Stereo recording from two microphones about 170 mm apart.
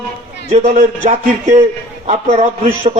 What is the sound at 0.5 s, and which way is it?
A man's voice, 40° right (ahead or behind).